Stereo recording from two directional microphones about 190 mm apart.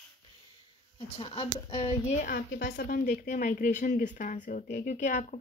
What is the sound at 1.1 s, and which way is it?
A woman's voice, 30° left (ahead or behind).